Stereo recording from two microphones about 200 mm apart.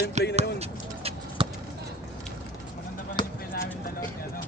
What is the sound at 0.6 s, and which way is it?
Bird, 30° right (ahead or behind).